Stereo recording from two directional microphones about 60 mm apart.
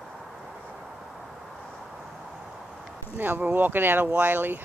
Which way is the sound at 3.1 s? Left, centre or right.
Right.